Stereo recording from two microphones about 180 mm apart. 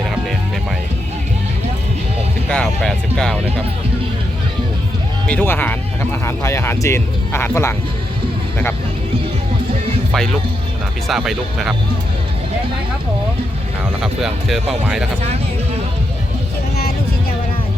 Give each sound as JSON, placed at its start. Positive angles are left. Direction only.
{"t": 2.5, "sound": "music", "side_deg": 5}
{"t": 5.3, "sound": "speech", "side_deg": 10}
{"t": 11.1, "sound": "speech", "side_deg": 0}
{"t": 14.0, "sound": "speech", "side_deg": 0}